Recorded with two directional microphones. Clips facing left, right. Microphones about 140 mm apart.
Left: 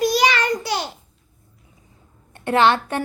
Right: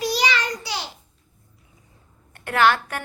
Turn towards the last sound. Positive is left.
turn(degrees=25)  # may be behind; listen again after turning